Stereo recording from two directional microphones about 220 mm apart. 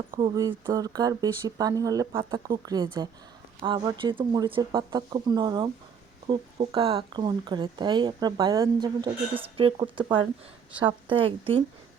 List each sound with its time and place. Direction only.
0.2 s speech: 20° right (ahead or behind)